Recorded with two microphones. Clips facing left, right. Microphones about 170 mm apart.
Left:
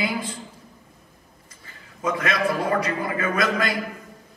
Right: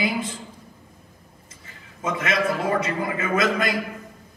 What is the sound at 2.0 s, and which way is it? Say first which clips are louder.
A man's voice: even; 25° right (ahead or behind).